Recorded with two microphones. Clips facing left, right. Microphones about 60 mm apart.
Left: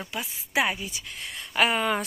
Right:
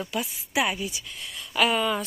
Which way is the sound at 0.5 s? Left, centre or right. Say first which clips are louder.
Even; left.